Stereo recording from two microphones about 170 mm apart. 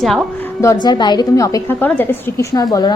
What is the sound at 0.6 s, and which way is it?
A woman's voice, 20° left (ahead or behind).